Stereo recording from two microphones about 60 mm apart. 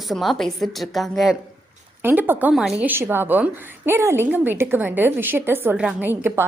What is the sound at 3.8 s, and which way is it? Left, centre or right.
Speech, right.